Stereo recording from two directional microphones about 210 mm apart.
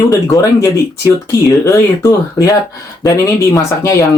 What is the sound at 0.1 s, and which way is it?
Speech, 15° left (ahead or behind).